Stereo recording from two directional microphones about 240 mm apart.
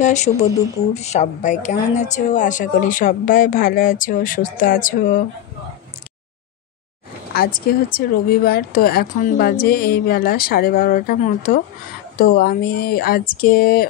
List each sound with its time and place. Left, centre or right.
0.0 s speech: left
7.3 s speech: left